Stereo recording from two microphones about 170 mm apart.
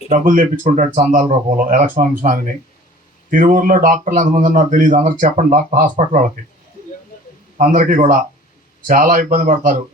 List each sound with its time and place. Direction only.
0.1 s a man's voice: 50° right (ahead or behind)
7.6 s a man's voice: 50° right (ahead or behind)